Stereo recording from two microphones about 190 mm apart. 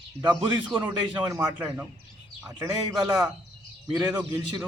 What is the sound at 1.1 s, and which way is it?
A man's voice, 20° right (ahead or behind).